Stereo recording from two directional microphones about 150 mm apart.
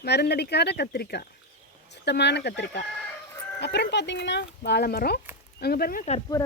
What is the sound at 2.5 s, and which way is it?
Speech, 90° left.